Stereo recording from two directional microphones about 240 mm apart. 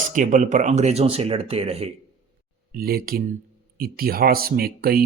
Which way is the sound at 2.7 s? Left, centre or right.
Right.